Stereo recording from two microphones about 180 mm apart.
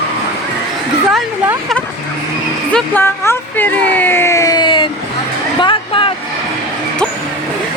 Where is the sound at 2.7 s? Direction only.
10° left (ahead or behind); by 4.9 s 25° left (ahead or behind).